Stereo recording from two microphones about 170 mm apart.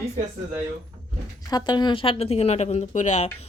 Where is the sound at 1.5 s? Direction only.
25° left (ahead or behind).